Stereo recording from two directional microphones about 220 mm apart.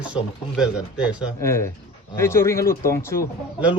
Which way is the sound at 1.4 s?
10° left (ahead or behind).